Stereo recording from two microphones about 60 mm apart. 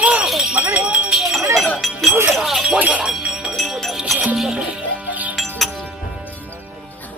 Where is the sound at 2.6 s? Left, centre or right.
Centre.